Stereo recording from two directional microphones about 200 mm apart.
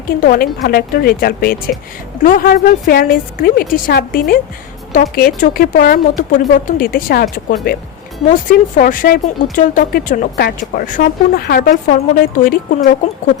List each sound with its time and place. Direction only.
0.2 s speech: 45° left (ahead or behind)